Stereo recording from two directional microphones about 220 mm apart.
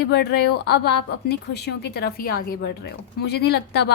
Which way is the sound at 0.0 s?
50° left (ahead or behind).